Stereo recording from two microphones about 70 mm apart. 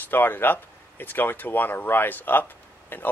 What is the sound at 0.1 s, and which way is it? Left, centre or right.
Speech, left.